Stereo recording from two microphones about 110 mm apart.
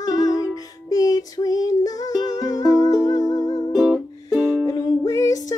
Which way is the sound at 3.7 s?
Centre (ahead or behind).